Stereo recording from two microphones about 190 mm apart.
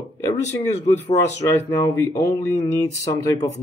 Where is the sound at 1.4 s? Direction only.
15° left (ahead or behind).